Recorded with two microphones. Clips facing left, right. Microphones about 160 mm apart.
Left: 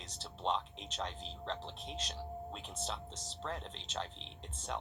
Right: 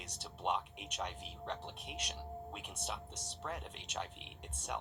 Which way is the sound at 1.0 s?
30° left (ahead or behind).